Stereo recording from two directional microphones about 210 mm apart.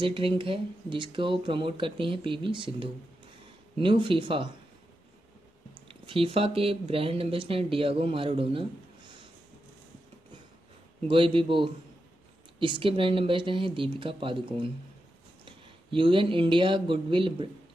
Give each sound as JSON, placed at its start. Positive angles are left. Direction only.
{"t": 0.0, "sound": "speech", "side_deg": -25}
{"t": 5.9, "sound": "speech", "side_deg": -25}
{"t": 11.1, "sound": "speech", "side_deg": -25}